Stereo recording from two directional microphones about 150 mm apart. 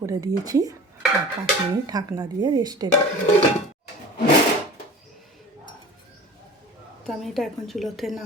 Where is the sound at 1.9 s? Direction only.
25° right (ahead or behind).